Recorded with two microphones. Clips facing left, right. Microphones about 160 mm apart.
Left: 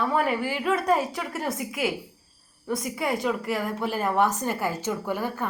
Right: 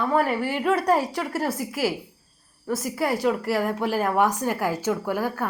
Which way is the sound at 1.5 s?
35° right (ahead or behind).